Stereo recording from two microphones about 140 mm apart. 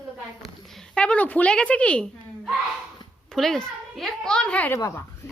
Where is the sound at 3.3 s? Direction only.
5° left (ahead or behind).